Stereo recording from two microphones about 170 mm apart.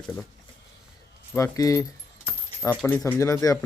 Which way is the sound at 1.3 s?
20° left (ahead or behind).